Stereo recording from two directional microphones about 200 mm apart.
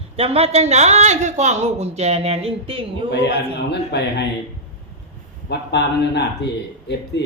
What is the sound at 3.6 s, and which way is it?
Speech, 60° left (ahead or behind).